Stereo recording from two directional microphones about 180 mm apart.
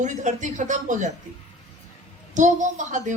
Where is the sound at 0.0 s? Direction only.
40° right (ahead or behind).